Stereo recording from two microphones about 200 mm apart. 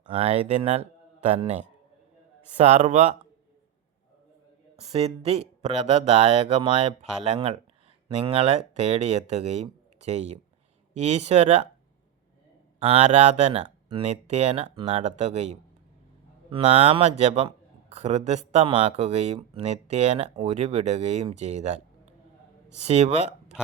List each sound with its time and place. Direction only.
0.2 s speech: 35° right (ahead or behind)
4.8 s speech: 30° right (ahead or behind)
12.8 s speech: 30° right (ahead or behind)